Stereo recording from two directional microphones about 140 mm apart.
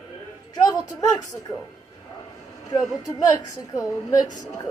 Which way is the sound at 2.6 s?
25° left (ahead or behind).